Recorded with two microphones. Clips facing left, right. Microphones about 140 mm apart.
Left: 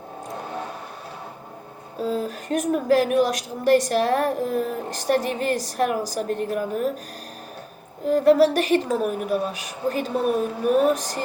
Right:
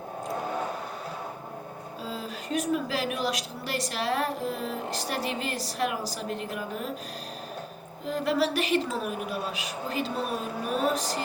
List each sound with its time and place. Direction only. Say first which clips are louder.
2.0 s a woman's voice: left 11 dB; 45° left (ahead or behind)
8.0 s a woman's voice: left 10 dB; 45° left (ahead or behind)